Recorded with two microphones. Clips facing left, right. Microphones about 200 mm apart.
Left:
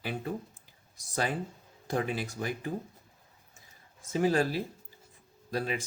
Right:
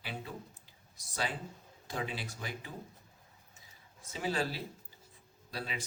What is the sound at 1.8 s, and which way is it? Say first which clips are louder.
Speech: left 7 dB; 50° left (ahead or behind).